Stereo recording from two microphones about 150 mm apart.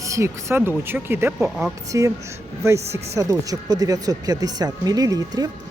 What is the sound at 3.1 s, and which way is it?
Speech, 25° right (ahead or behind).